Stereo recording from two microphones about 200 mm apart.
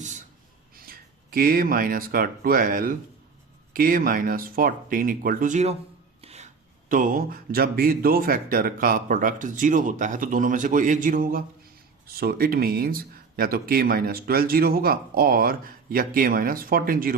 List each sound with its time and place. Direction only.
0.9 s speech: 45° right (ahead or behind)